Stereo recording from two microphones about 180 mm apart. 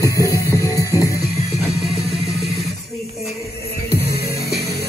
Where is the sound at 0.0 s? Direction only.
20° left (ahead or behind).